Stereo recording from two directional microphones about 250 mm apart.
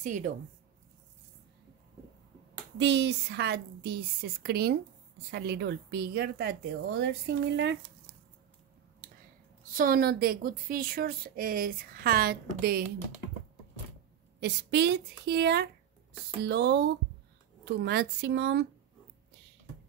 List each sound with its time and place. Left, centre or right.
0.0 s speech: right
2.8 s speech: right
9.8 s speech: right
14.4 s speech: right